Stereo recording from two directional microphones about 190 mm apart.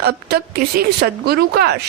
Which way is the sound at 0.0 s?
60° right (ahead or behind).